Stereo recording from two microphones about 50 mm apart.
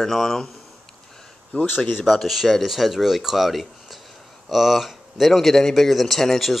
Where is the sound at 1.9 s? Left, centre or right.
Centre.